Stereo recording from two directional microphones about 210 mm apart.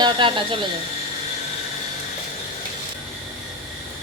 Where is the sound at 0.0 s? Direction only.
25° right (ahead or behind).